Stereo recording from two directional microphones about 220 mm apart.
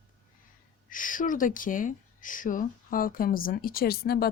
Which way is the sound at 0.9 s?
35° left (ahead or behind).